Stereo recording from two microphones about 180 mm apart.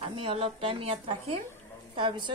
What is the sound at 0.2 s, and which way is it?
A woman's voice, 35° right (ahead or behind).